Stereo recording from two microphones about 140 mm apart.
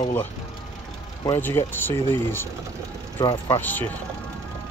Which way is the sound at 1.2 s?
20° left (ahead or behind).